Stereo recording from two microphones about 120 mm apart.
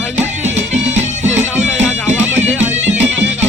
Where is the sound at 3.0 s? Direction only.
10° right (ahead or behind).